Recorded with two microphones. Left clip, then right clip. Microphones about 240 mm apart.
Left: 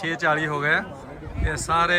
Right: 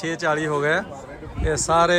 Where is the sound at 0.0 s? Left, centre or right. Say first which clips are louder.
Even; centre.